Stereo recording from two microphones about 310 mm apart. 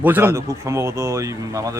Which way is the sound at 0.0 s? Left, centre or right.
Centre.